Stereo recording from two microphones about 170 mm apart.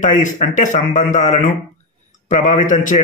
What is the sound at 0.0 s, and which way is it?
A man's voice, 45° left (ahead or behind).